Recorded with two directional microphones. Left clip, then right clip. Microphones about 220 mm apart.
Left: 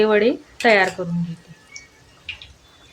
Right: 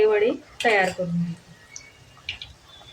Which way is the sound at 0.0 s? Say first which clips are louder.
Left 3 dB; 45° left (ahead or behind).